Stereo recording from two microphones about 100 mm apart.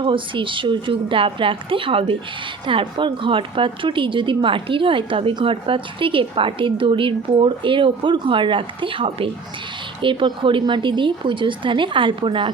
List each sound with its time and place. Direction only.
0.0 s a woman's voice: 55° right (ahead or behind)
10.0 s a woman's voice: 55° right (ahead or behind)